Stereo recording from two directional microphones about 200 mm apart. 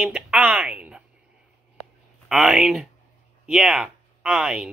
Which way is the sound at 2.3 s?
5° right (ahead or behind).